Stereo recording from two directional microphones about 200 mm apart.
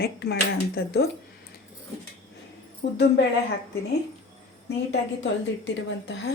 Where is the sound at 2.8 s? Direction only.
55° left (ahead or behind).